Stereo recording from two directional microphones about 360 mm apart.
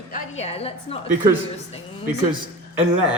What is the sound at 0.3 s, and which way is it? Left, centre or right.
Speech, centre.